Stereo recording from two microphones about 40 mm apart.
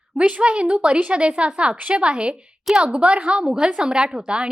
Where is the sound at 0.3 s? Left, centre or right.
Right.